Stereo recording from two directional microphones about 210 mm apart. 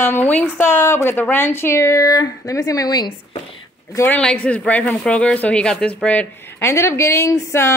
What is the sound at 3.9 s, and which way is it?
Speech, 10° left (ahead or behind).